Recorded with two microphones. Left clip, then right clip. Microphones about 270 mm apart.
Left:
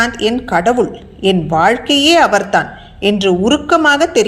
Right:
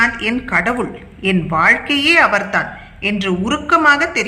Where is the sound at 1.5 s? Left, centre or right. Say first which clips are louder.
Even; centre.